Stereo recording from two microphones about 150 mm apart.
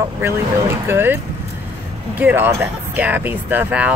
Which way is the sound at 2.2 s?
15° right (ahead or behind).